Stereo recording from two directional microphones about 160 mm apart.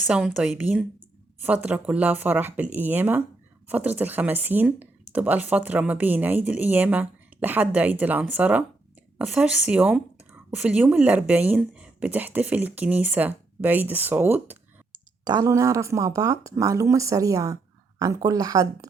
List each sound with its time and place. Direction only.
0.0 s speech: 5° right (ahead or behind)
15.2 s speech: 25° right (ahead or behind)